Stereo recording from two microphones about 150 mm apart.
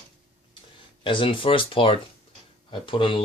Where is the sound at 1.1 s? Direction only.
35° left (ahead or behind).